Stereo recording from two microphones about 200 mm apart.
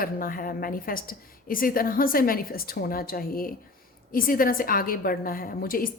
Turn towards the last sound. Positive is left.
turn(degrees=45)  # may be behind; listen again after turning